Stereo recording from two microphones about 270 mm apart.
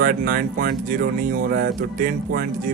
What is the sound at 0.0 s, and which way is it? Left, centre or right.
Speech, right.